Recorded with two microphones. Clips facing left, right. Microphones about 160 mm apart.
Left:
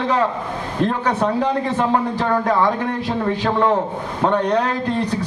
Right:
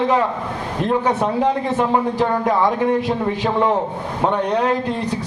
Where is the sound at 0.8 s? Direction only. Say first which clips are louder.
Right 1 dB; 10° right (ahead or behind).